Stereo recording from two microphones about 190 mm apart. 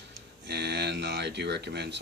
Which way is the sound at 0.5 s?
60° right (ahead or behind).